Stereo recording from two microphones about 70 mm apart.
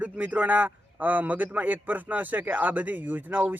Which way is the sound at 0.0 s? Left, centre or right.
Right.